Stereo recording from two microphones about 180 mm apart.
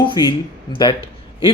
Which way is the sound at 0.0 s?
25° left (ahead or behind).